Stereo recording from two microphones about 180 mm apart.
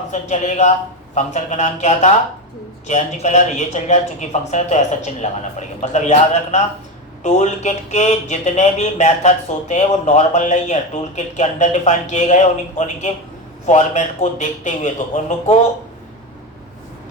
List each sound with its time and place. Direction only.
0.1 s speech: 40° left (ahead or behind)